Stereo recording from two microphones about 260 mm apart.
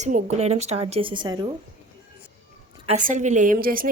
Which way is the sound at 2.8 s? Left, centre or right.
Right.